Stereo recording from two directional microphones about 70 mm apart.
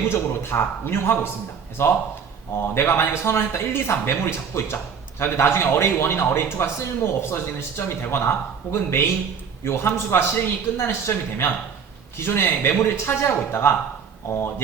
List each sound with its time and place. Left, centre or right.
0.1 s a man's voice: left